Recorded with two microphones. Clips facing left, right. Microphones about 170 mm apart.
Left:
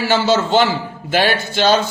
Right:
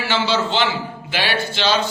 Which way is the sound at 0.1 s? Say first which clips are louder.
Left 5 dB; 45° left (ahead or behind).